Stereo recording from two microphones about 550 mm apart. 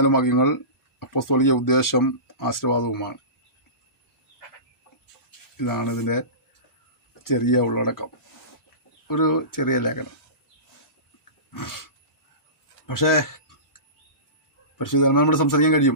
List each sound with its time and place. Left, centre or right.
0.0 s speech: left
5.5 s speech: left
7.3 s speech: left
11.5 s speech: left
12.9 s speech: left
14.8 s speech: left